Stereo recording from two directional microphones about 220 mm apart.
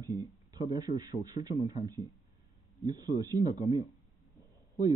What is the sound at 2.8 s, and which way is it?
Speech, 15° right (ahead or behind).